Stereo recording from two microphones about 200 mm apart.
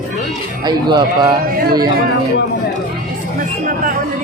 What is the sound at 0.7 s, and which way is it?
Speech, 20° right (ahead or behind).